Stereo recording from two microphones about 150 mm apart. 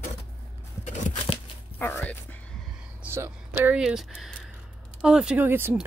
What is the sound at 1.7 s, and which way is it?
Speech, 10° left (ahead or behind).